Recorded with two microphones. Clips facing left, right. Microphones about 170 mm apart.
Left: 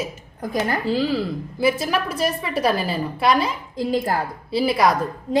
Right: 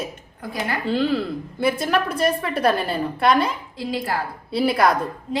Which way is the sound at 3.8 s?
45° left (ahead or behind).